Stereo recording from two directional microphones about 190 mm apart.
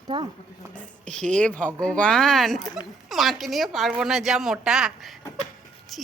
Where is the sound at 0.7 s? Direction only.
5° left (ahead or behind).